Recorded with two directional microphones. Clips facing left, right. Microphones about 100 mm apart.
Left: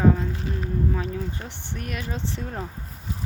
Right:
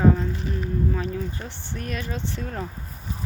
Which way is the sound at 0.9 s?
15° left (ahead or behind).